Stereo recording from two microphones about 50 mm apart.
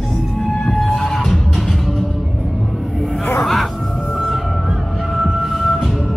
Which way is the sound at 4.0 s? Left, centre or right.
Centre.